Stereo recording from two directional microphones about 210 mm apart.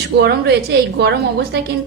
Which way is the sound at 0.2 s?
50° right (ahead or behind).